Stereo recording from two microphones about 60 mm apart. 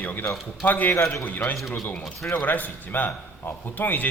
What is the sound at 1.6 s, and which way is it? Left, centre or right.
Speech, centre.